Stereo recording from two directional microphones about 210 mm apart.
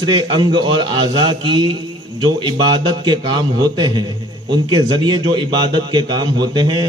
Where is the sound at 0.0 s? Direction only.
20° right (ahead or behind).